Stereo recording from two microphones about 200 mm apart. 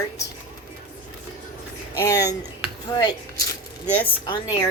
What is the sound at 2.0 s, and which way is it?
Speech, 15° left (ahead or behind).